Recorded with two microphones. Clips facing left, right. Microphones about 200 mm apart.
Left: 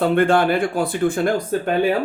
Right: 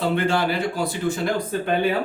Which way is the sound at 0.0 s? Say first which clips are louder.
Left 5 dB; 55° left (ahead or behind).